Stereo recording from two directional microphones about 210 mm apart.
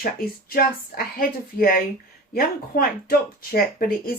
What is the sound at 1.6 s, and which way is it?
Speech, 45° left (ahead or behind).